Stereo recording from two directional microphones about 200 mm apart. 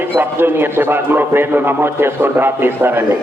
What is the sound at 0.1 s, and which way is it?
A man's voice, 10° right (ahead or behind).